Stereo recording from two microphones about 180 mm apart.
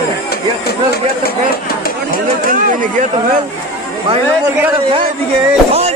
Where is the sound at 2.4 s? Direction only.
45° right (ahead or behind).